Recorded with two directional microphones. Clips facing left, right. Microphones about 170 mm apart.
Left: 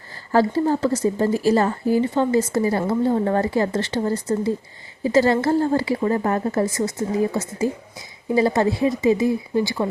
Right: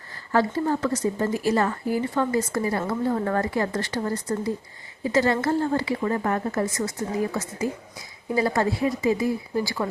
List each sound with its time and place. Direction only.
0.3 s a woman's voice: 30° left (ahead or behind)